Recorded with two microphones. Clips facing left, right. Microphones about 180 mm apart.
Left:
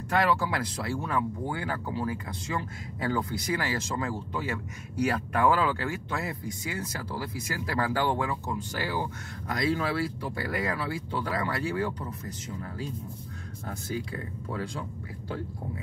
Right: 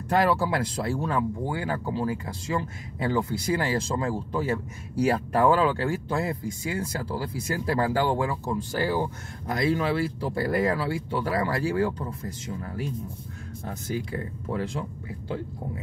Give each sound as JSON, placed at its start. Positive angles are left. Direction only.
{"t": 0.1, "sound": "speech", "side_deg": -35}
{"t": 13.7, "sound": "speech", "side_deg": -25}